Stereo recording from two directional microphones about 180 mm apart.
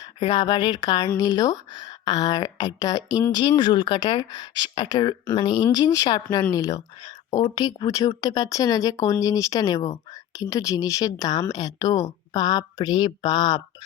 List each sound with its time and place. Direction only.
0.0 s speech: 25° left (ahead or behind)